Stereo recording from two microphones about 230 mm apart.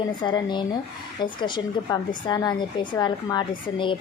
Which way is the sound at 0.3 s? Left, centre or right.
Centre.